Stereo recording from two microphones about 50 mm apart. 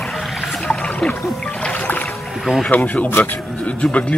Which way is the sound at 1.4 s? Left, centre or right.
Centre.